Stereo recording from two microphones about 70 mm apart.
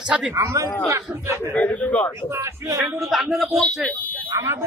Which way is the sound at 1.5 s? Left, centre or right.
Left.